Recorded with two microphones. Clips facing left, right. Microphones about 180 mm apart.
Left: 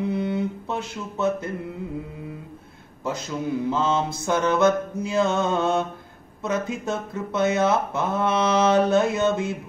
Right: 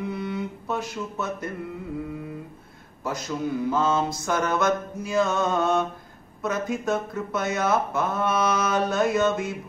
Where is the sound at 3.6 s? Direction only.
25° left (ahead or behind).